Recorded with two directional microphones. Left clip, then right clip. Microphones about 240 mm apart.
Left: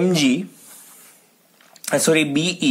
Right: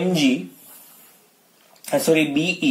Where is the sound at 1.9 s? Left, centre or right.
Left.